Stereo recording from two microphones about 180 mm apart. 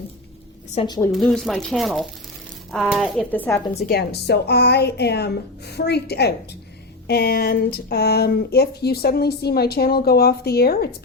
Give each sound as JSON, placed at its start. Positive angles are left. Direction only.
{"t": 1.1, "sound": "speech", "side_deg": 0}
{"t": 3.8, "sound": "speech", "side_deg": 60}